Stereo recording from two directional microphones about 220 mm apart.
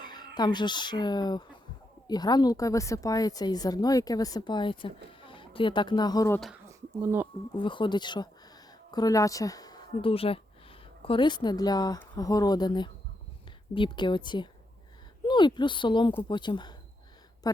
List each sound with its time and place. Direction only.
0.0 s a woman's voice: 20° left (ahead or behind)
6.7 s a sound: 10° right (ahead or behind)
7.5 s a woman's voice: 20° left (ahead or behind)